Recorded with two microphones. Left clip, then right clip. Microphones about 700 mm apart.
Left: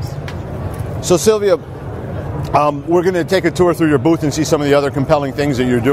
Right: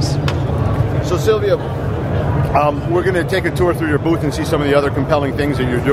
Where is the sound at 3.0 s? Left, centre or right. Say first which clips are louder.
Left 4 dB; left.